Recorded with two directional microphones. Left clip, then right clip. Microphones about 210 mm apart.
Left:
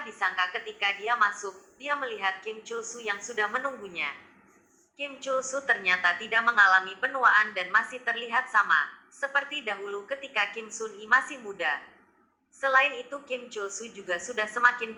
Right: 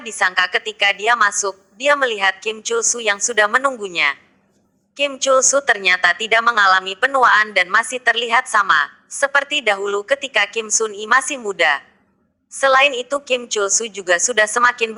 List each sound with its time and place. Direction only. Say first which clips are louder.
0.0 s a woman's voice: right 11 dB; 50° right (ahead or behind)